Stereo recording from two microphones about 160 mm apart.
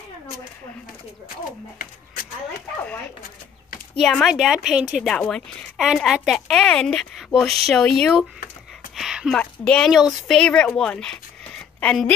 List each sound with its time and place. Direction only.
3.9 s a woman's voice: 5° left (ahead or behind)
8.9 s a sound: 5° right (ahead or behind)
9.4 s speech: 5° left (ahead or behind)